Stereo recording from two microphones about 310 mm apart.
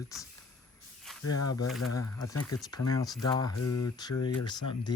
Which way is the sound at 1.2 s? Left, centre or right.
Left.